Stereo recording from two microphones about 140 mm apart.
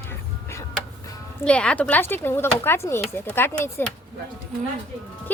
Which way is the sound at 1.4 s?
10° left (ahead or behind).